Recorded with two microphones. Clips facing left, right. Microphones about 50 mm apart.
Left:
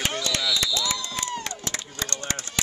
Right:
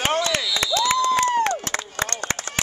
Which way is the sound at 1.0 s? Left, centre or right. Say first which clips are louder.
Right 13 dB; right.